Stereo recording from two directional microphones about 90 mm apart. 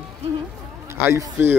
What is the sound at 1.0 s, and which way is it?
Speech, 25° right (ahead or behind).